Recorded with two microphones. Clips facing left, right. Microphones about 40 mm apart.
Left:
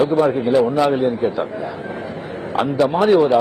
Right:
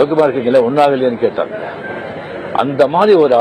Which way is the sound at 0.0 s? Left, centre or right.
Right.